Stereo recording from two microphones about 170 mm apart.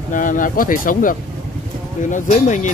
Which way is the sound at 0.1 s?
50° left (ahead or behind).